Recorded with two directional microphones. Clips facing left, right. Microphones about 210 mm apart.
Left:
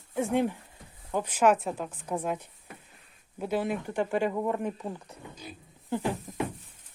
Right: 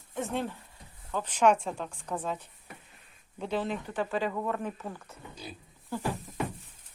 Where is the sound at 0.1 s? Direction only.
10° left (ahead or behind).